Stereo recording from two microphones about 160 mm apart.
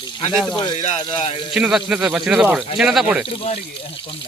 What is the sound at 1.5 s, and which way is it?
Speech, 5° right (ahead or behind).